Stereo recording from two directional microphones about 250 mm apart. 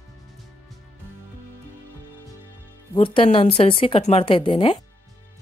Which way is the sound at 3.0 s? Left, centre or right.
Left.